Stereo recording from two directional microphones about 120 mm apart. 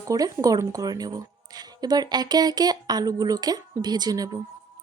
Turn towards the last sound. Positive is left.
turn(degrees=-30)  # may be behind; listen again after turning